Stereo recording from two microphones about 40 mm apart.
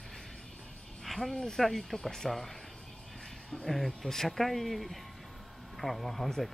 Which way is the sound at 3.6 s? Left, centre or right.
Centre.